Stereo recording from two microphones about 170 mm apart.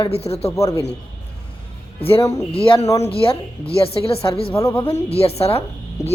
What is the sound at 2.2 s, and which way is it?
Speech, 20° left (ahead or behind).